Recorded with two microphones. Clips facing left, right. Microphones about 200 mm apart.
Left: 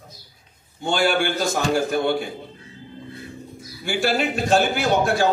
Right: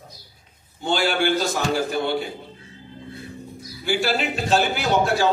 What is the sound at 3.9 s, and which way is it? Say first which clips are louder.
A man's voice: left 1 dB; 50° left (ahead or behind).